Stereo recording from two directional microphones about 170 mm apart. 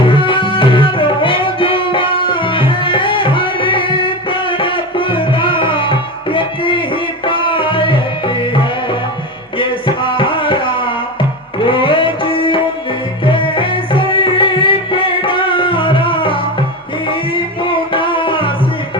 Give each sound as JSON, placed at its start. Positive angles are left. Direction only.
{"t": 0.0, "sound": "music", "side_deg": 30}